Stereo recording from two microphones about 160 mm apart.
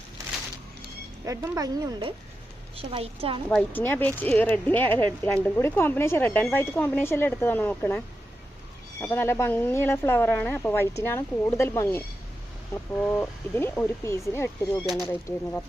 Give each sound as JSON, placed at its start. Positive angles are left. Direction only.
{"t": 1.2, "sound": "a woman's voice", "side_deg": -20}
{"t": 3.5, "sound": "speech", "side_deg": 10}
{"t": 14.8, "sound": "speech", "side_deg": 0}